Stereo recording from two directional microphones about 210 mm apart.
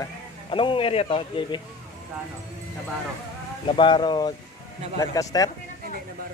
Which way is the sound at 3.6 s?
25° left (ahead or behind).